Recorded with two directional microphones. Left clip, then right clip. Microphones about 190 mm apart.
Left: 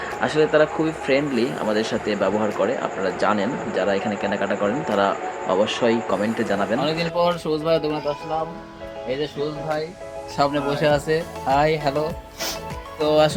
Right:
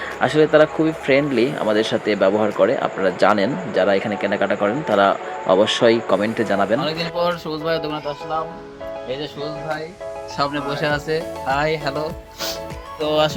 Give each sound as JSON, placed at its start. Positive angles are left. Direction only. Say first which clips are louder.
{"t": 0.2, "sound": "speech", "louder": "right 4 dB", "side_deg": -10}
{"t": 6.8, "sound": "speech", "louder": "even", "side_deg": 15}
{"t": 10.3, "sound": "speech", "louder": "left 2 dB", "side_deg": 15}
{"t": 13.0, "sound": "speech", "louder": "left 1 dB", "side_deg": 15}